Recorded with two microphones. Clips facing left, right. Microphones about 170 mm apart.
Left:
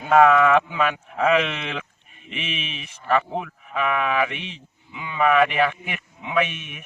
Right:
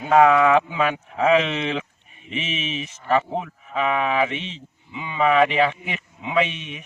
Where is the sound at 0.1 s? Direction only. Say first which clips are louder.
Even; 20° right (ahead or behind).